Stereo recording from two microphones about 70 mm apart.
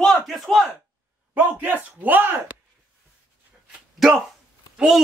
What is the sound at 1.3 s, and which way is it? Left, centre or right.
Speech, right.